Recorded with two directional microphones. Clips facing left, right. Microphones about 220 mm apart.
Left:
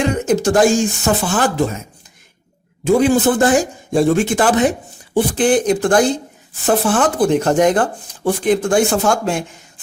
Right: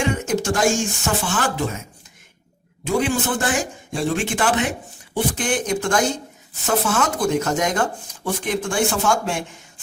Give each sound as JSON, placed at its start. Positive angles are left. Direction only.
{"t": 0.0, "sound": "speech", "side_deg": 35}
{"t": 2.8, "sound": "speech", "side_deg": 35}